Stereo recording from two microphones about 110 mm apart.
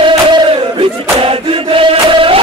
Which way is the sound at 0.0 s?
50° right (ahead or behind).